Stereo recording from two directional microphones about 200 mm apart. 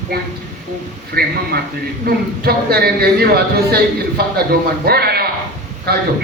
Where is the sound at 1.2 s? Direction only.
50° right (ahead or behind).